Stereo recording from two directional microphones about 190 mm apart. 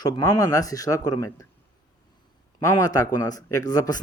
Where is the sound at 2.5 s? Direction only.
20° left (ahead or behind).